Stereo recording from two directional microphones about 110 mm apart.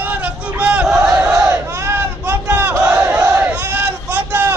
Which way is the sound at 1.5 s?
20° right (ahead or behind).